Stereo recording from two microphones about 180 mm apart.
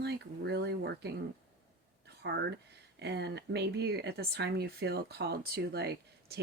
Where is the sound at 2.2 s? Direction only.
70° right (ahead or behind).